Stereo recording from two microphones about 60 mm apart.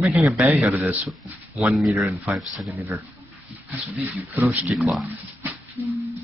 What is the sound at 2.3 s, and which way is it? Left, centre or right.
Speech, right.